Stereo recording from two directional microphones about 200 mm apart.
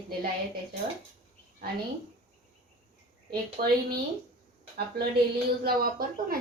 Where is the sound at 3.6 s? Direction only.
45° right (ahead or behind).